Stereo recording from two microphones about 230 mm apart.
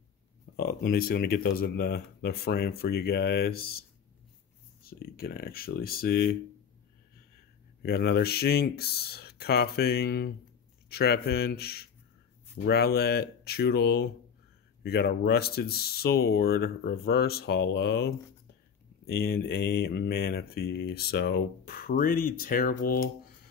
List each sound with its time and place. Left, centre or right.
0.6 s speech: left
4.8 s speech: left
7.8 s speech: left